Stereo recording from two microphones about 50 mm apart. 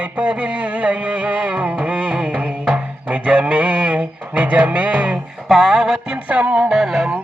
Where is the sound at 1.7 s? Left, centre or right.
Right.